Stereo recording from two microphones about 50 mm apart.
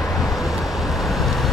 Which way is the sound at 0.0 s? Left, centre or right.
Centre.